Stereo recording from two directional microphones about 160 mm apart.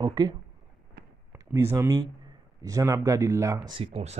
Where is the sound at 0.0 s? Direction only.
25° right (ahead or behind).